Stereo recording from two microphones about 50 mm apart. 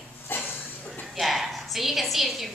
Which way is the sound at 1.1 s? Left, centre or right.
Centre.